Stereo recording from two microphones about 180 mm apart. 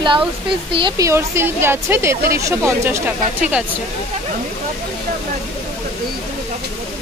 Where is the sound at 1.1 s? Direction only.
15° right (ahead or behind).